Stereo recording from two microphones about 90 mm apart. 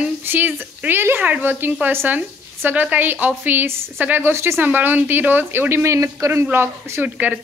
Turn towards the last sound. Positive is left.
turn(degrees=-20)  # may be behind; listen again after turning